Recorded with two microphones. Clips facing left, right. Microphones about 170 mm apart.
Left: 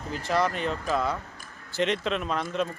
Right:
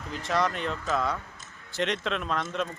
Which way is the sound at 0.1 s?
Centre (ahead or behind).